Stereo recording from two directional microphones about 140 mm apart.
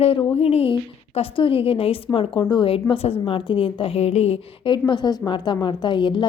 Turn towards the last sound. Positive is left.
turn(degrees=35)  # may be behind; listen again after turning